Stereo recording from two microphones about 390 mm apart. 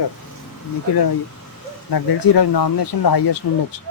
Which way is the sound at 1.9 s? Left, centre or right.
Left.